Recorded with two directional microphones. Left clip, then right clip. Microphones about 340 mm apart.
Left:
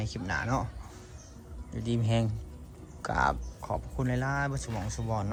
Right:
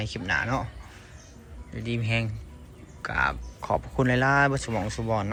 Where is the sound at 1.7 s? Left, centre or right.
Centre.